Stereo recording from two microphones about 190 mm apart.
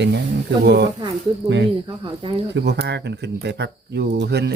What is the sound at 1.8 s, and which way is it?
Speech, 25° right (ahead or behind).